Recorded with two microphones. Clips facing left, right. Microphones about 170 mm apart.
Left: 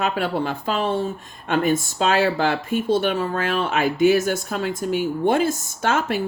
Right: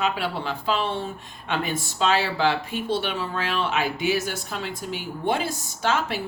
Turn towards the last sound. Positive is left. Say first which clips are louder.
# left 3 dB
turn(degrees=50)  # may be behind; listen again after turning